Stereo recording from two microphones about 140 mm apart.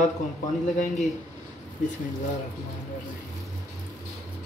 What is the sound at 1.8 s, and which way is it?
Speech, 70° left (ahead or behind).